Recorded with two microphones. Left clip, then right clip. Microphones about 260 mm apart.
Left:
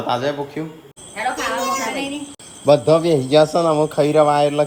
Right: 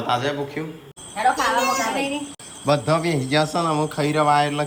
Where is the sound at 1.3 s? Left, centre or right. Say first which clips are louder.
Left 1 dB; centre.